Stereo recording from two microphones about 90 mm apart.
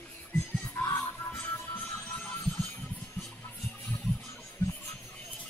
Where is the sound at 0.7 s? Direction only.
25° left (ahead or behind).